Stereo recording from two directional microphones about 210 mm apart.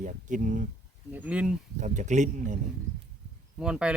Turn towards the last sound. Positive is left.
turn(degrees=-5)  # may be behind; listen again after turning